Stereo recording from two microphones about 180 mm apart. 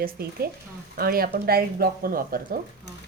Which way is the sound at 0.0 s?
60° right (ahead or behind).